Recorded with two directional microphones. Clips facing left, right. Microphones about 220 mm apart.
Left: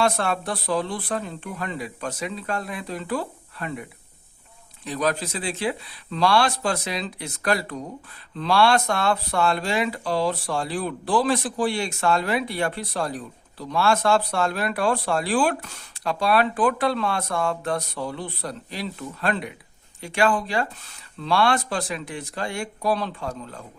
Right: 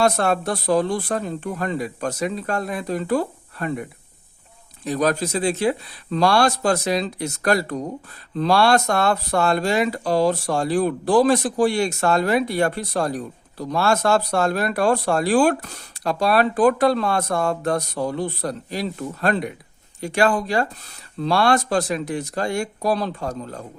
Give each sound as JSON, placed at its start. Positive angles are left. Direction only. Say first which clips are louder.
{"t": 0.0, "sound": "speech", "louder": "right 4 dB", "side_deg": -40}
{"t": 4.9, "sound": "speech", "louder": "right 4 dB", "side_deg": -45}